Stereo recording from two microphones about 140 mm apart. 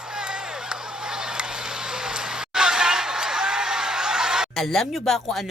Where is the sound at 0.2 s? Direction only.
5° right (ahead or behind).